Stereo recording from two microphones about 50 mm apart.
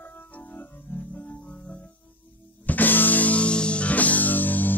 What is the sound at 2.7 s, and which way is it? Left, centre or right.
Music, left.